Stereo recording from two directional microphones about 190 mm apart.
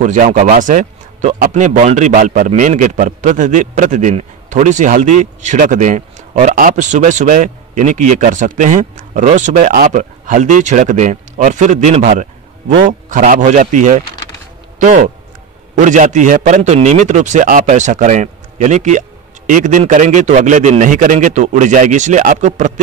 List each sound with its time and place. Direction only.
0.0 s speech: 40° right (ahead or behind)